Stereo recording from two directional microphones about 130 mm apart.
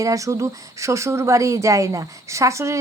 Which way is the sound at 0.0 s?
25° right (ahead or behind).